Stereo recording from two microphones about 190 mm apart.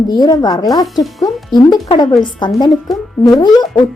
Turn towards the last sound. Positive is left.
turn(degrees=20)  # may be behind; listen again after turning